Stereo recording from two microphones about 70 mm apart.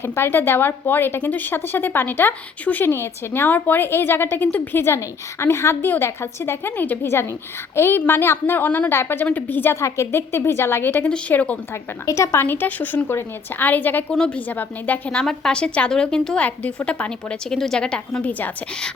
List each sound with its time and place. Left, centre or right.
0.0 s a woman's voice: left
7.0 s a woman's voice: left
12.0 s a woman's voice: left
14.1 s a woman's voice: centre
14.3 s a woman's voice: left
15.2 s a woman's voice: centre